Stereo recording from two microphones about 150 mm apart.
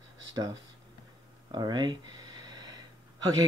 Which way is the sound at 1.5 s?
30° right (ahead or behind).